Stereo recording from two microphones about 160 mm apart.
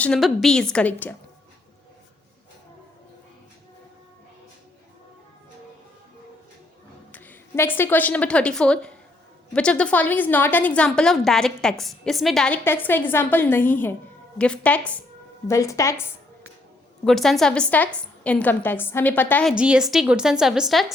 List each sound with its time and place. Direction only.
0.0 s a woman's voice: centre (ahead or behind)
7.1 s a woman's voice: 15° left (ahead or behind)
12.6 s a woman's voice: 15° left (ahead or behind)
15.4 s speech: 20° left (ahead or behind)
17.0 s a woman's voice: centre (ahead or behind)
19.5 s a woman's voice: 5° right (ahead or behind)